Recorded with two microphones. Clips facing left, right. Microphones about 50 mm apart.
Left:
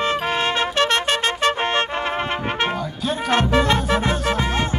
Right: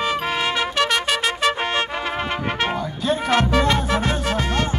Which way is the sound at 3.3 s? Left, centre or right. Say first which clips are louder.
Left 2 dB; left.